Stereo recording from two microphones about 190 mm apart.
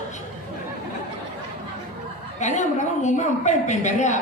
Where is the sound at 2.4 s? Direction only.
40° left (ahead or behind).